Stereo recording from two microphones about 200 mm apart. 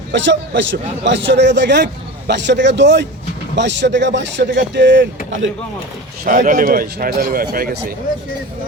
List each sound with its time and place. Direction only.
0.1 s a man's voice: 65° right (ahead or behind)
6.2 s a man's voice: 40° right (ahead or behind)